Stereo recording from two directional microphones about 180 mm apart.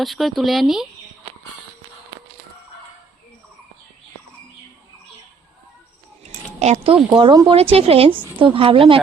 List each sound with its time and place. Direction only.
0.0 s speech: centre (ahead or behind)
6.6 s a woman's voice: 40° right (ahead or behind)
7.1 s a woman's voice: 25° right (ahead or behind)